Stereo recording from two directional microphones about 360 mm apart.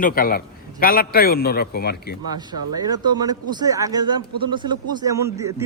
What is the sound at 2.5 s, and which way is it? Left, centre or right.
Speech, centre.